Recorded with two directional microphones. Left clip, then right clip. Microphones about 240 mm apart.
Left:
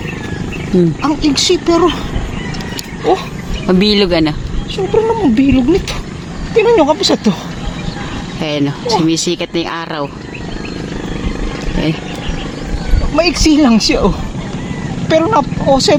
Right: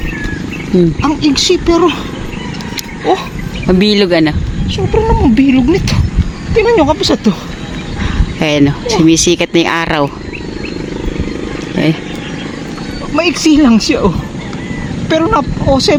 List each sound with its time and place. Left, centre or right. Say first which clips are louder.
1.0 s speech: right 2 dB; centre
3.7 s speech: right 1 dB; centre
4.9 s speech: right 1 dB; right
8.4 s speech: right 6 dB; right
13.1 s speech: right 1 dB; centre